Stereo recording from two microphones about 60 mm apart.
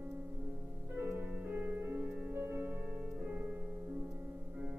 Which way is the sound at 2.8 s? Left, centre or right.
Right.